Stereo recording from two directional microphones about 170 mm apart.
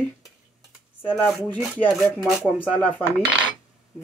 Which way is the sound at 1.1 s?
5° left (ahead or behind).